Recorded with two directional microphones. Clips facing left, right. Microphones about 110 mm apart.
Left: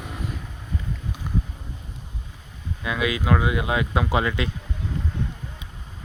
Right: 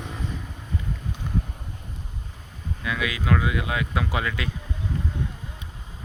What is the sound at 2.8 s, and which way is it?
Speech, 25° left (ahead or behind).